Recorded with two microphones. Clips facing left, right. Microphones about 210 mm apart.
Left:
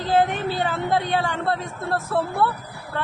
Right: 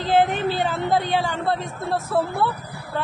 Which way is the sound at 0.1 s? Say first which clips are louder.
Right 1 dB; 25° right (ahead or behind).